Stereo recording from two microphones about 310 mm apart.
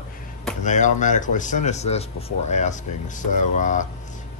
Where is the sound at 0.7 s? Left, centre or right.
Left.